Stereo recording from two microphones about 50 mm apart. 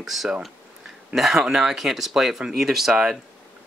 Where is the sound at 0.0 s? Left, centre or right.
Centre.